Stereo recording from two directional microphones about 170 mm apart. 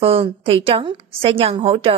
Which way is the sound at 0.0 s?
35° right (ahead or behind).